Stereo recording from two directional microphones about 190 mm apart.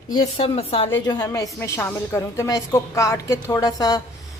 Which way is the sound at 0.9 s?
15° left (ahead or behind).